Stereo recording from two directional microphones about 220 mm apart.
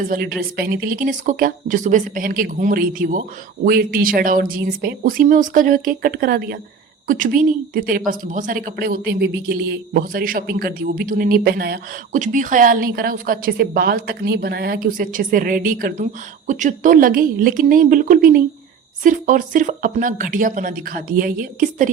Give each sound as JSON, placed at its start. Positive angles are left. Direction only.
{"t": 0.0, "sound": "speech", "side_deg": -40}